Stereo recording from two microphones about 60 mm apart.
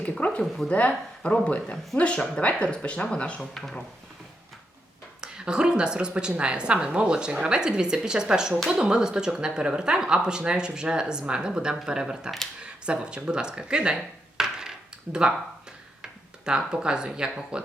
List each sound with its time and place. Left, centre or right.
0.0 s speech: left
3.5 s speech: centre
5.2 s a woman's voice: centre
12.6 s a sound: centre
16.5 s a woman's voice: centre